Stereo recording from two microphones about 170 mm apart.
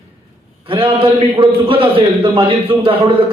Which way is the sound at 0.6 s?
30° right (ahead or behind).